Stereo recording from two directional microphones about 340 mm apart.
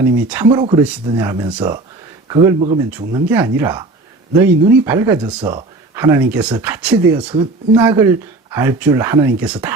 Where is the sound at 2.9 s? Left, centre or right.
Centre.